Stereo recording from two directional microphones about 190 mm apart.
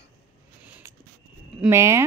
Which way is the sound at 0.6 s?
10° right (ahead or behind).